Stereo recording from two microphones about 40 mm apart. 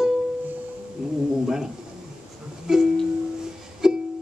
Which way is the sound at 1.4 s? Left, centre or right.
Centre.